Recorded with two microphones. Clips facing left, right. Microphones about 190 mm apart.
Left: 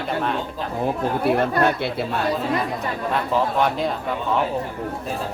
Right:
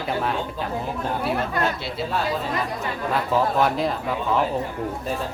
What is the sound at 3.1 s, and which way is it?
A man's voice, centre (ahead or behind).